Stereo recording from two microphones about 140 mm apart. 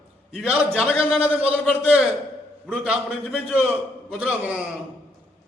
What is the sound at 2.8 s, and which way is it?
Speech, 10° right (ahead or behind).